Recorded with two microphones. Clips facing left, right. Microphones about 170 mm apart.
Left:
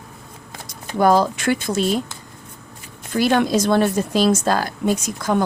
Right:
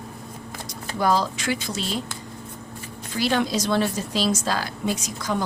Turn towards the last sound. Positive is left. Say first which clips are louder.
# left 6 dB
turn(degrees=55)  # may be behind; listen again after turning